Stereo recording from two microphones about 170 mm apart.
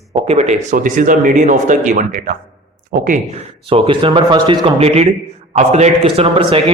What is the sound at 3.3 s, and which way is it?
Speech, 35° right (ahead or behind).